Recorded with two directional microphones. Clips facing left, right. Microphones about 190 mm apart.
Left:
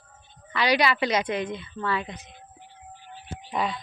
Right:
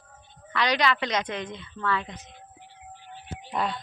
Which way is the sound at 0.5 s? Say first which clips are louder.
Left 2 dB; 10° left (ahead or behind).